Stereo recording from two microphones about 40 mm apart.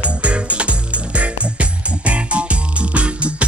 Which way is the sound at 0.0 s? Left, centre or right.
Right.